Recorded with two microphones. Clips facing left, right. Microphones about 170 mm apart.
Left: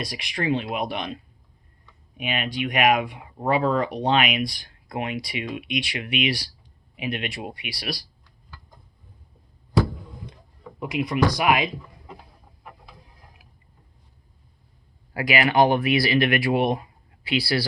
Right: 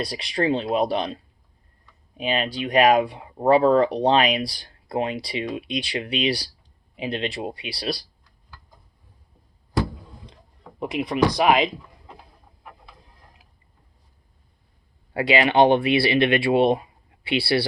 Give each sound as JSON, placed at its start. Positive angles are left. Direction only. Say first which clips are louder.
{"t": 0.0, "sound": "speech", "louder": "right 4 dB", "side_deg": -30}
{"t": 10.8, "sound": "speech", "louder": "right 1 dB", "side_deg": -25}
{"t": 15.1, "sound": "speech", "louder": "right 2 dB", "side_deg": -25}